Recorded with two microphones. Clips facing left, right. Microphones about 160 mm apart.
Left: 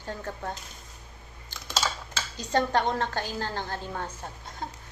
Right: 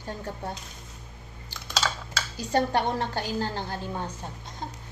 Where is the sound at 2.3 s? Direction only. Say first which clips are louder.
Even; 10° right (ahead or behind).